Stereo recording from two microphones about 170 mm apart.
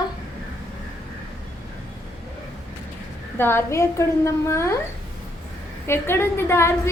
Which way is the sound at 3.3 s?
15° left (ahead or behind).